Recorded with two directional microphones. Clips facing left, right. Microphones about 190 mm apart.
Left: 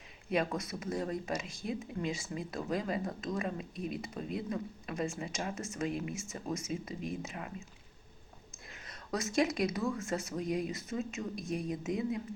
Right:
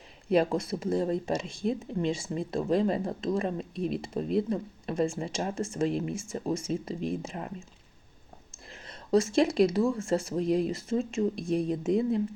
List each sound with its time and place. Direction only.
0.3 s speech: 30° right (ahead or behind)
8.7 s speech: 30° right (ahead or behind)